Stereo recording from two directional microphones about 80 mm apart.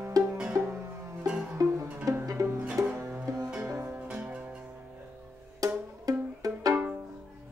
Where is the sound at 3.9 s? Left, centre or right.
Centre.